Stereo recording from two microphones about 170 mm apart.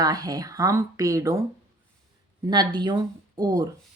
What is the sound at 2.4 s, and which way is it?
Speech, 25° right (ahead or behind).